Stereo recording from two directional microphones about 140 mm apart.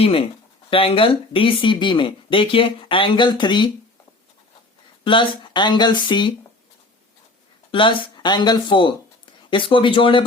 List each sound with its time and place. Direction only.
0.0 s speech: 40° left (ahead or behind)
5.0 s speech: 35° left (ahead or behind)
7.7 s speech: 35° left (ahead or behind)